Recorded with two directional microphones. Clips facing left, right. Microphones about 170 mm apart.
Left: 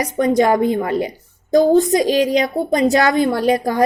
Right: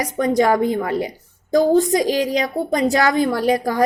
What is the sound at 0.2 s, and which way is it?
A woman's voice, 20° left (ahead or behind).